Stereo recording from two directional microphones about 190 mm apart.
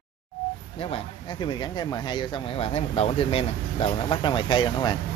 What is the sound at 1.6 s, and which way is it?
Speech, 25° left (ahead or behind).